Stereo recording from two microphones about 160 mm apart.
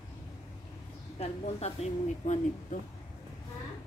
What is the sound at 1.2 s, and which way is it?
Speech, 40° left (ahead or behind).